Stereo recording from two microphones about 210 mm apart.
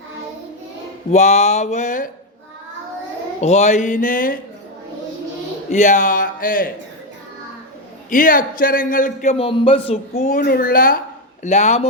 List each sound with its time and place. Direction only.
1.1 s a man's voice: 35° left (ahead or behind)
3.4 s a man's voice: 30° left (ahead or behind)
5.7 s a man's voice: 35° left (ahead or behind)
8.1 s a man's voice: 40° left (ahead or behind)